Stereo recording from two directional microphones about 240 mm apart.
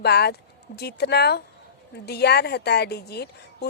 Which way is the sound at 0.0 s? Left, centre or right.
Left.